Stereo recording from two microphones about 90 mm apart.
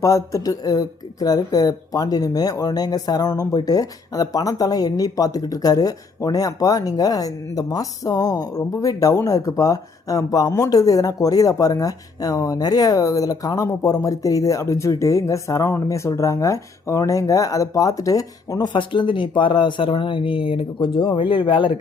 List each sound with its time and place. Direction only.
0.0 s speech: 35° left (ahead or behind)
18.7 s speech: 65° left (ahead or behind)